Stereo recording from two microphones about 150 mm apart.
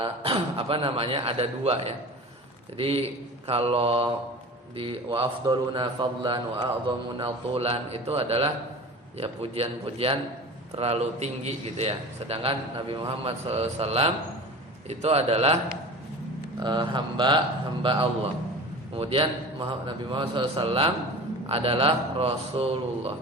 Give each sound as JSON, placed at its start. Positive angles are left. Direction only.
{"t": 0.0, "sound": "a man's voice", "side_deg": -35}
{"t": 16.6, "sound": "a man's voice", "side_deg": -30}